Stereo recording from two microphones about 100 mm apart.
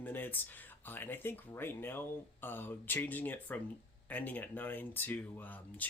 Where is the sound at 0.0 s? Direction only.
20° left (ahead or behind).